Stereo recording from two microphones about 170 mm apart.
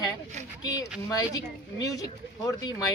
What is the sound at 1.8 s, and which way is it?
Speech, 20° left (ahead or behind).